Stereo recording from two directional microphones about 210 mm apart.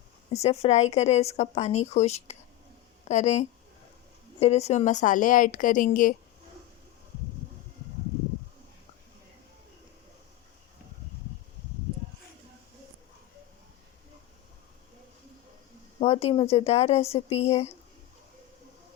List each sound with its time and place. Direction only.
0.3 s a woman's voice: 30° left (ahead or behind)
16.0 s speech: 30° left (ahead or behind)